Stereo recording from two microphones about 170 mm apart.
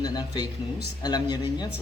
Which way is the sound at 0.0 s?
25° left (ahead or behind).